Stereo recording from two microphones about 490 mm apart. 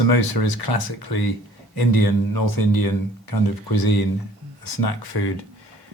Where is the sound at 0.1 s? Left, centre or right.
Left.